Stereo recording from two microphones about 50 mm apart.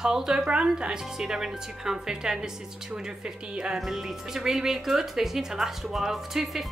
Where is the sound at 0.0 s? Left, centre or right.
Centre.